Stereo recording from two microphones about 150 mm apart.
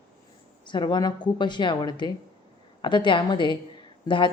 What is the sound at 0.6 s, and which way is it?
A woman's voice, 30° left (ahead or behind).